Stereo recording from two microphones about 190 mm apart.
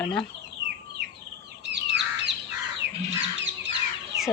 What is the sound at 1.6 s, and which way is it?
Crow, 65° right (ahead or behind).